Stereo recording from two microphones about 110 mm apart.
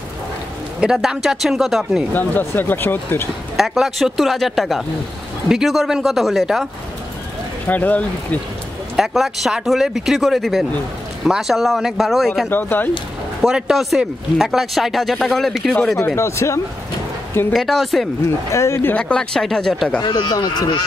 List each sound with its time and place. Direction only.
0.7 s speech: 5° right (ahead or behind)
2.1 s speech: 15° left (ahead or behind)
3.5 s speech: centre (ahead or behind)
7.6 s speech: 15° left (ahead or behind)
8.9 s speech: centre (ahead or behind)
12.4 s speech: 20° left (ahead or behind)
13.4 s speech: 5° right (ahead or behind)
16.2 s speech: 25° left (ahead or behind)
17.5 s speech: centre (ahead or behind)
18.2 s speech: 25° left (ahead or behind)
18.9 s speech: 10° left (ahead or behind)
20.0 s speech: 40° left (ahead or behind)